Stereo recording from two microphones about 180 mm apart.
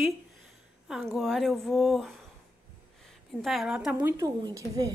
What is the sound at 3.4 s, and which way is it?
Speech, centre (ahead or behind).